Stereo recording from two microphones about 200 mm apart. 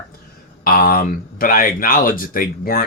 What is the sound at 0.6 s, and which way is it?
Speech, 45° left (ahead or behind).